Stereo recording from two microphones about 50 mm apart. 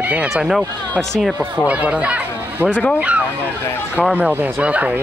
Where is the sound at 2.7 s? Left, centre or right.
Left.